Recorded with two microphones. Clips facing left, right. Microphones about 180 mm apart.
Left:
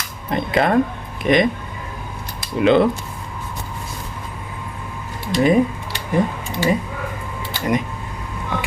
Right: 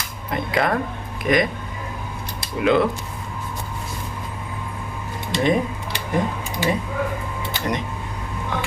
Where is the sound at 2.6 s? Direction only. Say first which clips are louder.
Left 4 dB; 25° left (ahead or behind).